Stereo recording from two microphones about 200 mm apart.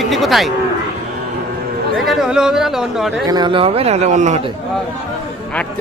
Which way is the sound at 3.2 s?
20° right (ahead or behind).